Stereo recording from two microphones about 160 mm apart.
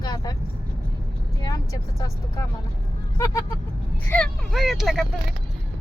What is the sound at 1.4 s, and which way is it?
Speech, 25° left (ahead or behind).